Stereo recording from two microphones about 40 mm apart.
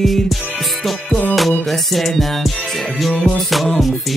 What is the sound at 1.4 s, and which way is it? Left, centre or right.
Music, centre.